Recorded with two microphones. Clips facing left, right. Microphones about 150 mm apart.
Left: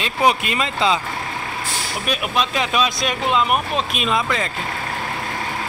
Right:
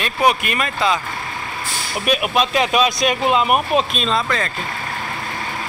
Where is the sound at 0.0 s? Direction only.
20° left (ahead or behind).